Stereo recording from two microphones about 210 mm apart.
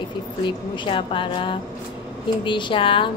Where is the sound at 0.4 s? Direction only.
25° left (ahead or behind).